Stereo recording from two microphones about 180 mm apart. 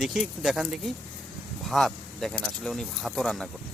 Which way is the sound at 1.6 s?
Centre (ahead or behind).